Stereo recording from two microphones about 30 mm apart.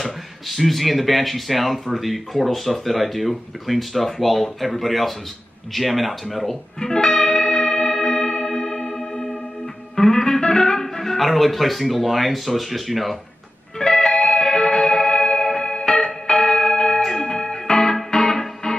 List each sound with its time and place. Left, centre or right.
0.5 s speech: centre
6.8 s music: left
9.9 s speech: centre
13.7 s music: centre
16.3 s bell: centre
17.1 s music: centre